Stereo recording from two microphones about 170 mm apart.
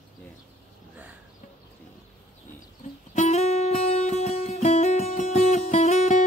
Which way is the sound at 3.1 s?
45° left (ahead or behind).